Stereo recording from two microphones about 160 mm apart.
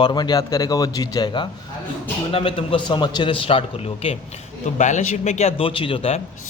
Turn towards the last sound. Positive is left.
turn(degrees=35)  # may be behind; listen again after turning